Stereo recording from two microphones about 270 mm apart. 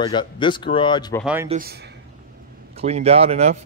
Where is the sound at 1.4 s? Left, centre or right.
Right.